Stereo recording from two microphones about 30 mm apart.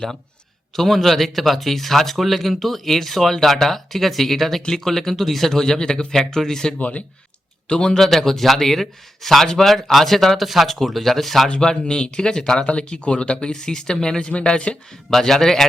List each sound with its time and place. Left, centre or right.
0.8 s speech: centre
5.5 s speech: centre
6.7 s speech: left
7.7 s speech: left
8.0 s speech: centre
11.4 s speech: left
12.6 s speech: left
13.5 s speech: left
14.7 s speech: left
15.1 s speech: centre